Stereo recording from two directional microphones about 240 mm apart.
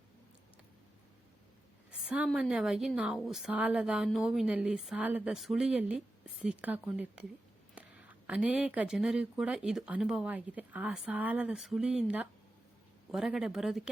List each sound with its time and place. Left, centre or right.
1.9 s speech: centre